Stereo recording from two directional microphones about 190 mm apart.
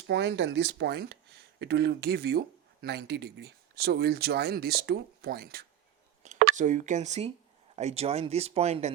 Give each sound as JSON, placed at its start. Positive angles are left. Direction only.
{"t": 0.1, "sound": "speech", "side_deg": -70}
{"t": 6.2, "sound": "a sound", "side_deg": -40}
{"t": 6.6, "sound": "speech", "side_deg": -40}